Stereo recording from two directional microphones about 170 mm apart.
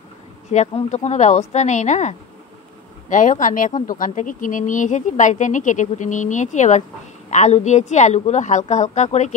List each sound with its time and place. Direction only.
0.5 s speech: 45° left (ahead or behind)